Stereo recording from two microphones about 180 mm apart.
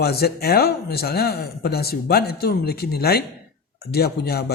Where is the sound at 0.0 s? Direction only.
60° left (ahead or behind).